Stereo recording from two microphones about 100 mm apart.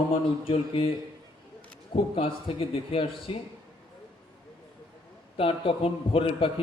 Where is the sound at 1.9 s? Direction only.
70° left (ahead or behind).